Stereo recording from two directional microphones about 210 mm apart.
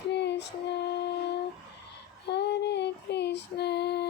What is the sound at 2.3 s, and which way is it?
Child singing, 55° left (ahead or behind).